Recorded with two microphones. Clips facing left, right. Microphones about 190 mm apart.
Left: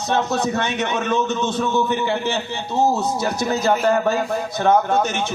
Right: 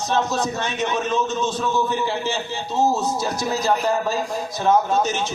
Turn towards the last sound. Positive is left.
turn(degrees=60)  # may be behind; listen again after turning